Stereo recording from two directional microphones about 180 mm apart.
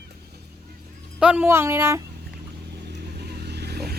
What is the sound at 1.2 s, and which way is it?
Speech, 5° right (ahead or behind).